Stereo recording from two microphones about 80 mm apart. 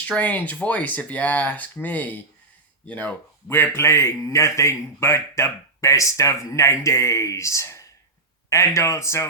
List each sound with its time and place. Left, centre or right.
0.2 s speech: left
3.8 s speech: left